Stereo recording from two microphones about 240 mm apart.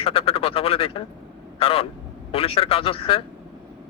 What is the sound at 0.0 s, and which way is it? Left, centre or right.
A man's voice, left.